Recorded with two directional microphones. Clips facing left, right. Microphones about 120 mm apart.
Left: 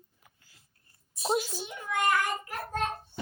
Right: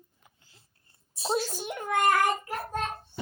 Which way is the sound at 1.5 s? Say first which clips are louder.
Right 5 dB; 50° right (ahead or behind).